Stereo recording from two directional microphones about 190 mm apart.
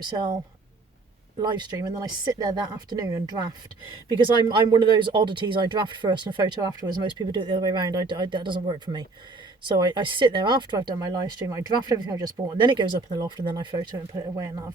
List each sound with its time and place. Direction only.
0.0 s speech: 25° right (ahead or behind)
1.4 s speech: 20° right (ahead or behind)